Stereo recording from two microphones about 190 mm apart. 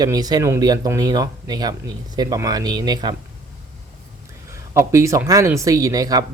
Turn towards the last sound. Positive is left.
turn(degrees=-20)  # may be behind; listen again after turning